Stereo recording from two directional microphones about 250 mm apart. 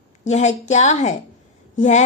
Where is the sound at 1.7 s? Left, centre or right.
Left.